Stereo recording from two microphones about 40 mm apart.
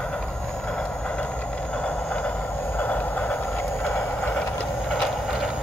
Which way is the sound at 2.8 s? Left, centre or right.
Left.